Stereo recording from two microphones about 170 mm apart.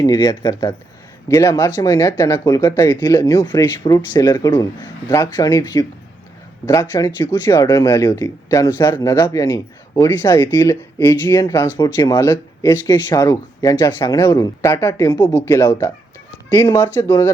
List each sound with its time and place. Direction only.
0.0 s speech: 25° left (ahead or behind)